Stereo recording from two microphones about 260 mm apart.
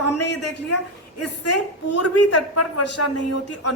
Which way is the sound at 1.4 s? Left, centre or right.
Left.